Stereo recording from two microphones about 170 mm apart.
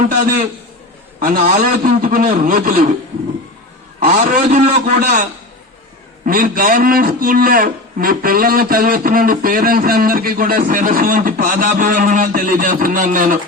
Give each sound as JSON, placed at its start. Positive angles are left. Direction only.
{"t": 1.4, "sound": "a man's voice", "side_deg": -55}
{"t": 4.0, "sound": "a man's voice", "side_deg": -55}
{"t": 6.2, "sound": "a man's voice", "side_deg": -55}